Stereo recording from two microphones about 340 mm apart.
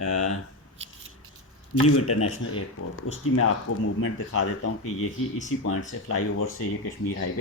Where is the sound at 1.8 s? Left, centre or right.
Left.